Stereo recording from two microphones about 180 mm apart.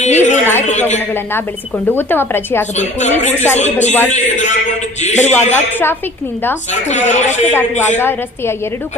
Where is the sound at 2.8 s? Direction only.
40° left (ahead or behind).